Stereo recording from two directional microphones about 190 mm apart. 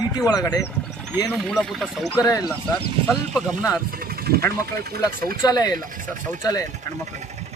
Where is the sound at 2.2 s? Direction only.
20° left (ahead or behind).